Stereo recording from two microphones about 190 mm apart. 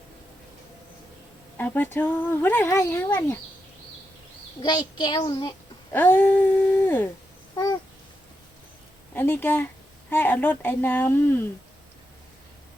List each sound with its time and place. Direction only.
1.5 s speech: 10° left (ahead or behind)
4.6 s a child's voice: 25° left (ahead or behind)
5.9 s a sound: 10° left (ahead or behind)
7.5 s babbling: 20° left (ahead or behind)
9.1 s speech: 10° left (ahead or behind)